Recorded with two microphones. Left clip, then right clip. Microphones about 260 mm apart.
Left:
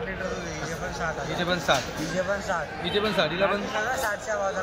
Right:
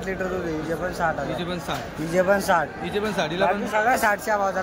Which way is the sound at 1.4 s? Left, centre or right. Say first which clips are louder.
Left 5 dB; centre.